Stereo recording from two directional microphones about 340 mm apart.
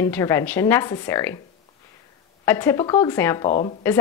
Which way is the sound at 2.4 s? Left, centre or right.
Centre.